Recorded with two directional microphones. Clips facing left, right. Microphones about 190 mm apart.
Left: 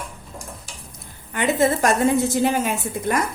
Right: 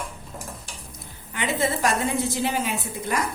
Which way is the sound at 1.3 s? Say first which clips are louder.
Left 6 dB; 50° left (ahead or behind).